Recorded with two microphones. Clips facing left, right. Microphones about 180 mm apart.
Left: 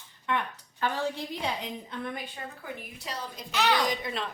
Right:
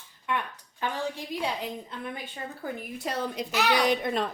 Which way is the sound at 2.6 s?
50° right (ahead or behind).